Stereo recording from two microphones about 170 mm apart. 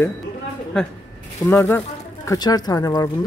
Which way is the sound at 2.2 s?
25° left (ahead or behind).